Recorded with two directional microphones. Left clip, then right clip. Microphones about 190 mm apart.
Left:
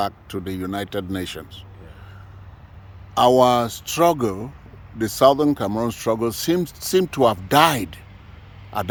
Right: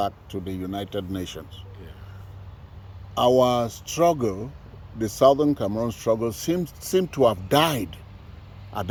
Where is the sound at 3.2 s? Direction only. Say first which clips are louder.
Left 4 dB; 30° left (ahead or behind).